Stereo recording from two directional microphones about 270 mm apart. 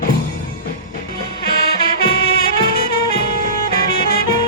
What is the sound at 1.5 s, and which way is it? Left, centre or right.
Music, left.